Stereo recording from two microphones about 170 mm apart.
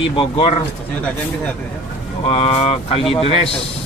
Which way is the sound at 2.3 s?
35° left (ahead or behind).